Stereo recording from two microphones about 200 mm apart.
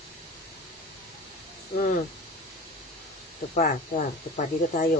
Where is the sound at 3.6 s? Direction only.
40° left (ahead or behind).